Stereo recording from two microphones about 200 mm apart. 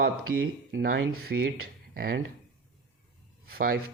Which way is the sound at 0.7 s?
60° right (ahead or behind).